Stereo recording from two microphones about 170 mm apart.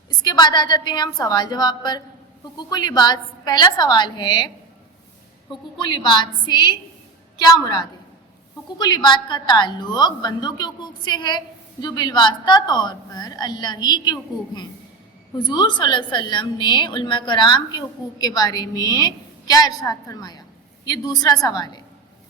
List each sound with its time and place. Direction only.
0.1 s a woman's voice: 25° left (ahead or behind)
5.7 s a woman's voice: 25° left (ahead or behind)